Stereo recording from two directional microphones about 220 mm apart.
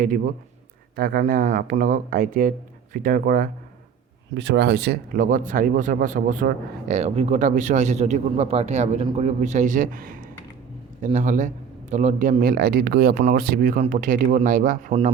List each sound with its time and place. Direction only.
0.9 s speech: 40° right (ahead or behind)
4.4 s speech: 50° right (ahead or behind)